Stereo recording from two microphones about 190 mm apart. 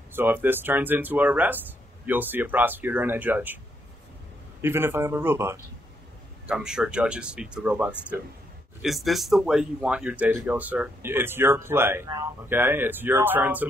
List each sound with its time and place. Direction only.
0.1 s speech: 10° right (ahead or behind)
4.6 s speech: 10° right (ahead or behind)